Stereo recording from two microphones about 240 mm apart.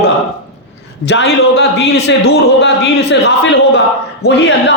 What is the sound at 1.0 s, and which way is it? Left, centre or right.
A man's voice, left.